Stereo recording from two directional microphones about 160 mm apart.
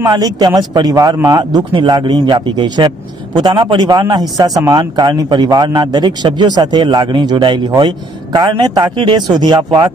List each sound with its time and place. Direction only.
0.0 s a man's voice: 25° right (ahead or behind)